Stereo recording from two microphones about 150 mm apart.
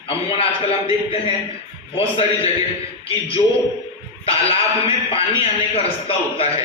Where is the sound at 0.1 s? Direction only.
40° left (ahead or behind).